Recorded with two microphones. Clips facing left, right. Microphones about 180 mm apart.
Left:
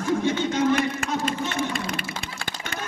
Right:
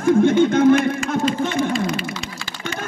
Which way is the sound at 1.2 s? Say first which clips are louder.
Right 6 dB; 55° left (ahead or behind).